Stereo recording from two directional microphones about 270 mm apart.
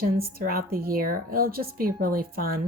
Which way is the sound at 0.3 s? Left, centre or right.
Right.